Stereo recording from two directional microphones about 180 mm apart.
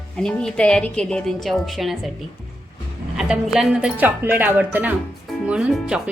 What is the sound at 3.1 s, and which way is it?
Speech, centre (ahead or behind).